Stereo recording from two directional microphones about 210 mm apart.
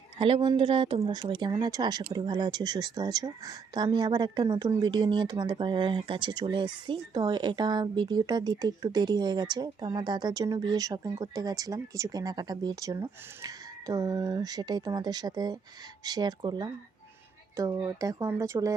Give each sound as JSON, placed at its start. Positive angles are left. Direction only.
{"t": 0.2, "sound": "speech", "side_deg": -25}